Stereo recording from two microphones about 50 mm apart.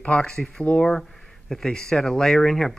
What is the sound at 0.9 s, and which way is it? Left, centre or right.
Speech, centre.